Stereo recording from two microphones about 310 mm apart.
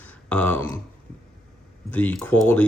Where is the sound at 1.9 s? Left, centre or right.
Centre.